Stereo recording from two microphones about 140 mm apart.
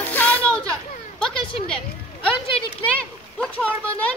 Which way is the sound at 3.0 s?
10° left (ahead or behind).